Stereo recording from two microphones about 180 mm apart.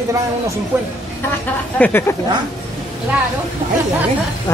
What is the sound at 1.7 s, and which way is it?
Speech, 10° left (ahead or behind).